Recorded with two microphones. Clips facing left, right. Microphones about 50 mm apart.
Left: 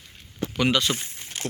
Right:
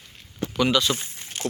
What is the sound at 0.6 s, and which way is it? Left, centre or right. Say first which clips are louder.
Speech: right 1 dB; left.